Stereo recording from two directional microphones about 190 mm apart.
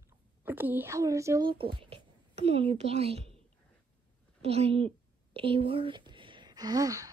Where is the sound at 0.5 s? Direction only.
10° right (ahead or behind).